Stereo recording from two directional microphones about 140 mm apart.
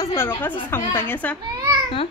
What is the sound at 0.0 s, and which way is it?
A woman's voice, 20° left (ahead or behind).